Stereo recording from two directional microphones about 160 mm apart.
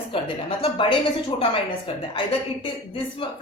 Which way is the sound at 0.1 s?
35° left (ahead or behind).